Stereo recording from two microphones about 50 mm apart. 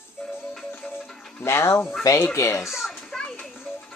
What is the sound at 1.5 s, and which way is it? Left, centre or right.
Speech, left.